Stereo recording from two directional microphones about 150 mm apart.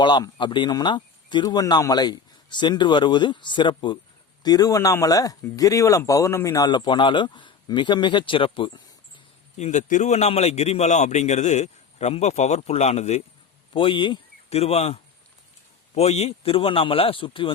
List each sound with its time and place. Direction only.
0.0 s speech: 30° left (ahead or behind)
9.6 s a man's voice: 50° left (ahead or behind)
13.7 s a man's voice: 35° left (ahead or behind)